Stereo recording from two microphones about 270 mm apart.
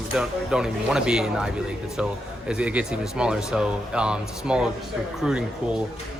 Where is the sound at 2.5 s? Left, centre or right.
Centre.